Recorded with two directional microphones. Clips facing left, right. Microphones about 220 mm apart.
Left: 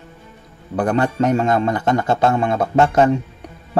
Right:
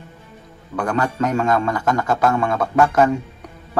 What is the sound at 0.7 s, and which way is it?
Speech, 30° left (ahead or behind).